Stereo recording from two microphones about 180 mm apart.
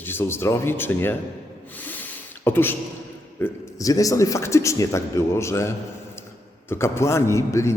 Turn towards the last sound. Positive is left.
turn(degrees=15)  # may be behind; listen again after turning